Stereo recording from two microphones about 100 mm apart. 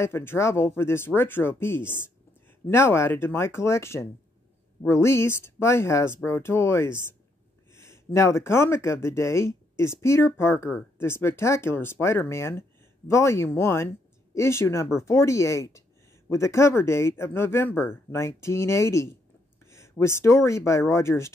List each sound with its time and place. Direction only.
0.0 s speech: 25° left (ahead or behind)